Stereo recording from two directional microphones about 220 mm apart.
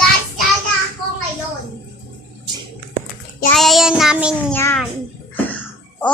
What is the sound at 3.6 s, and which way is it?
Speech, centre (ahead or behind).